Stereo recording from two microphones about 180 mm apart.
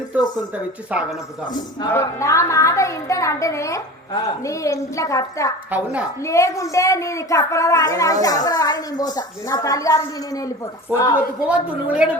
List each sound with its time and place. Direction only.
0.9 s a woman's voice: 10° right (ahead or behind)
1.8 s a woman's voice: 15° left (ahead or behind)
5.7 s a woman's voice: 10° right (ahead or behind)
6.2 s a woman's voice: 15° left (ahead or behind)
10.9 s a woman's voice: 10° right (ahead or behind)